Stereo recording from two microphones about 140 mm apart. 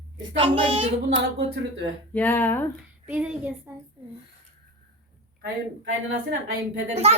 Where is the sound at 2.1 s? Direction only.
10° left (ahead or behind).